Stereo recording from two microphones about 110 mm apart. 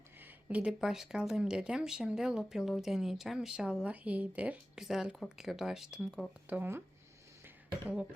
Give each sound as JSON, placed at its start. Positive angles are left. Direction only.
{"t": 0.2, "sound": "speech", "side_deg": -15}
{"t": 6.5, "sound": "speech", "side_deg": -20}
{"t": 7.4, "sound": "a sound", "side_deg": -15}